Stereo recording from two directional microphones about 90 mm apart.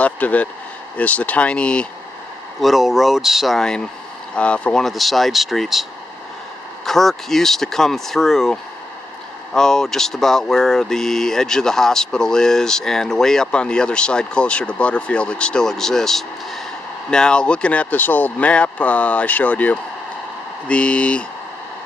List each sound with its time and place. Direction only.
0.0 s speech: 15° left (ahead or behind)
2.6 s speech: centre (ahead or behind)
6.9 s speech: 5° left (ahead or behind)